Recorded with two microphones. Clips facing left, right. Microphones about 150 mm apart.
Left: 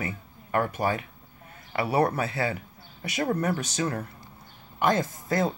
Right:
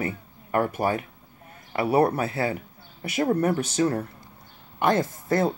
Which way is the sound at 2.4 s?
45° right (ahead or behind).